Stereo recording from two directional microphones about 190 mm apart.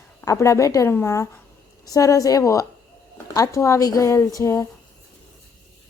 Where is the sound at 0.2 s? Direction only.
15° left (ahead or behind).